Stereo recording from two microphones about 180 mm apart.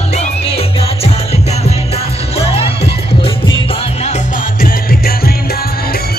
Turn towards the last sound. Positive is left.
turn(degrees=55)  # may be behind; listen again after turning